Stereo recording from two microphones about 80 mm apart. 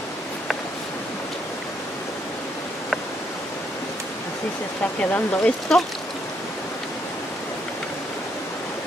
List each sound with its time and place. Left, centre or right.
5.1 s speech: centre
5.7 s speech: centre